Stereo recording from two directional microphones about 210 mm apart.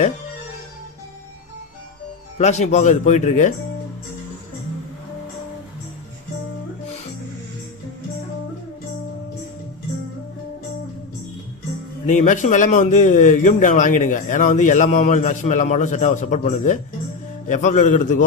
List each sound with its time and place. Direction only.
2.4 s a man's voice: 35° left (ahead or behind)
12.0 s a man's voice: 35° left (ahead or behind)